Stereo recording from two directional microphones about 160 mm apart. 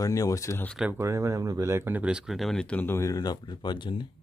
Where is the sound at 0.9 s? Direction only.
20° right (ahead or behind); by 4.1 s 30° left (ahead or behind).